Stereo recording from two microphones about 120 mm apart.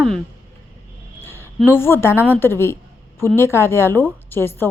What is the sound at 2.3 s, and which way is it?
A woman's voice, 20° left (ahead or behind).